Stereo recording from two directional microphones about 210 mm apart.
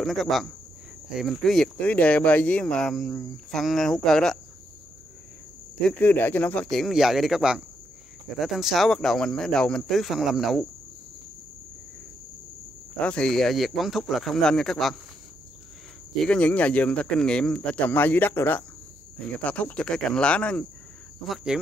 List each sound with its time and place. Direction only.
0.0 s speech: centre (ahead or behind)
5.8 s speech: 5° left (ahead or behind)
13.0 s speech: 5° left (ahead or behind)
16.3 s speech: 5° left (ahead or behind)